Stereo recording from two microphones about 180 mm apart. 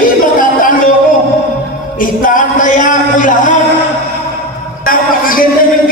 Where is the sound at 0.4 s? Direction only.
50° left (ahead or behind).